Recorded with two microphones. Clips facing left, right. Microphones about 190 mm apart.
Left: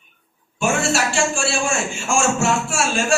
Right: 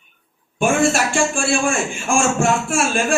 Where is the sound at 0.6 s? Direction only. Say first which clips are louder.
Right 3 dB; 55° right (ahead or behind).